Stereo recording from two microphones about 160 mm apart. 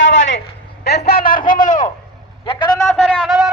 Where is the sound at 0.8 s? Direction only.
80° left; by 1.9 s 55° left (ahead or behind).